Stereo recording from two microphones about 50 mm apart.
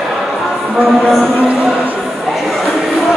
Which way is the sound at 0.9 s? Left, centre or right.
Centre.